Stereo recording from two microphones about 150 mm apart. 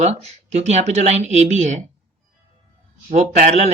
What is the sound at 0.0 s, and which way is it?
Speech, 45° right (ahead or behind).